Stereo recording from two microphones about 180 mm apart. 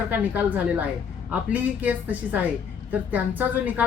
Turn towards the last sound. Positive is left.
turn(degrees=-10)  # may be behind; listen again after turning